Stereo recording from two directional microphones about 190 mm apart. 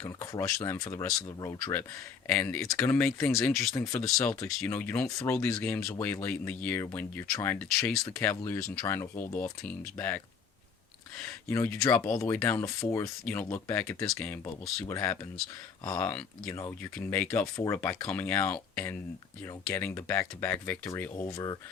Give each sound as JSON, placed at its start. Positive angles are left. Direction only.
{"t": 0.0, "sound": "speech", "side_deg": 15}
{"t": 2.2, "sound": "speech", "side_deg": 10}
{"t": 4.2, "sound": "speech", "side_deg": 15}
{"t": 11.2, "sound": "speech", "side_deg": 10}